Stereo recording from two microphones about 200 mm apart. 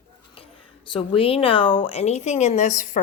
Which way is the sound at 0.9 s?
25° left (ahead or behind).